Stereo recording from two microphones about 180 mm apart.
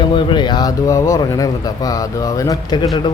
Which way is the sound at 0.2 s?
25° left (ahead or behind).